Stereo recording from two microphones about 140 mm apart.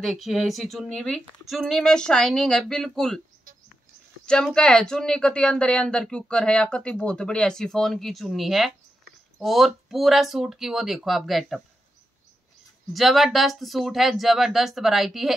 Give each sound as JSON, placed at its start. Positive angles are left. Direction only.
{"t": 0.0, "sound": "speech", "side_deg": 0}
{"t": 3.5, "sound": "bird", "side_deg": -90}
{"t": 4.3, "sound": "speech", "side_deg": 5}
{"t": 12.9, "sound": "speech", "side_deg": 0}